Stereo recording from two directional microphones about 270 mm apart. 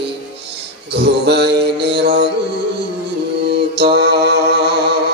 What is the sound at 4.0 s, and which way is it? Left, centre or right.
Mantra, right.